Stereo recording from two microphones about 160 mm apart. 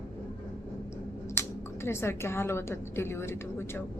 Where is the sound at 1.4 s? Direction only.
15° left (ahead or behind).